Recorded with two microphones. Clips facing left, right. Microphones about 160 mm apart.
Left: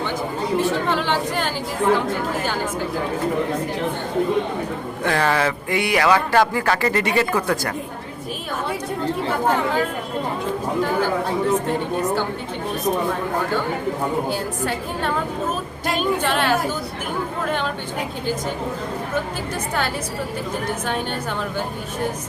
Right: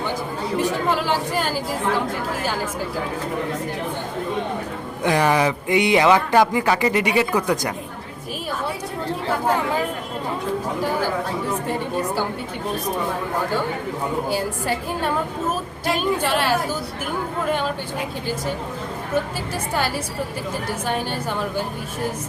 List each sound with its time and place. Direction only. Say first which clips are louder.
0.6 s speech: right 3 dB; 5° right (ahead or behind)
5.0 s speech: right 2 dB; 15° right (ahead or behind)
14.3 s a woman's voice: right 1 dB; 5° right (ahead or behind)
16.2 s a woman's voice: even; 5° right (ahead or behind)